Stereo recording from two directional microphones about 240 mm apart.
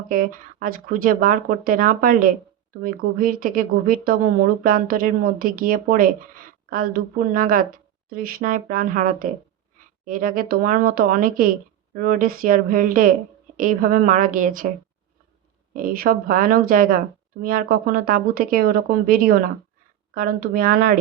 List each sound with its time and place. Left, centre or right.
0.1 s speech: right
15.7 s speech: right